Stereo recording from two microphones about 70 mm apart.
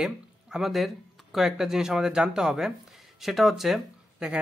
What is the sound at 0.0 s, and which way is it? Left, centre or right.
Speech, centre.